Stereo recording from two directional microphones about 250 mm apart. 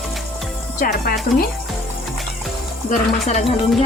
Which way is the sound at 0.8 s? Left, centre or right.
Left.